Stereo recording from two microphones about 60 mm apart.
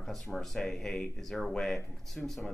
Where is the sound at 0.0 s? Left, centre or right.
Centre.